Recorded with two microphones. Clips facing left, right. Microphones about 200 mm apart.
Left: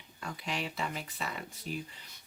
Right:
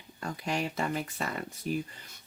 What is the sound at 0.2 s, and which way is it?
Speech, 45° right (ahead or behind).